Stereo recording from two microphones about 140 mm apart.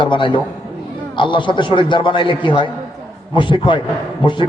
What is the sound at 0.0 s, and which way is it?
A man's voice, 35° left (ahead or behind).